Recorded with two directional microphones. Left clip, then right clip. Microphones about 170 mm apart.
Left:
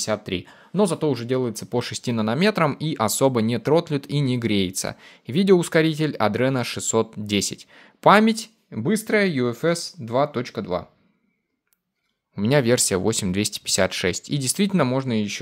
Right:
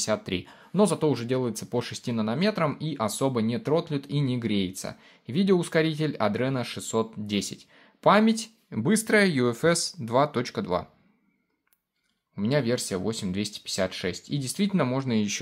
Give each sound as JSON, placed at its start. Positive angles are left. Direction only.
{"t": 0.0, "sound": "speech", "side_deg": 20}
{"t": 8.6, "sound": "speech", "side_deg": 10}
{"t": 12.4, "sound": "speech", "side_deg": 35}